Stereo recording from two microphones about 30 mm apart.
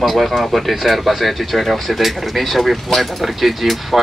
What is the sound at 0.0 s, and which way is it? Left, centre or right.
Speech, centre.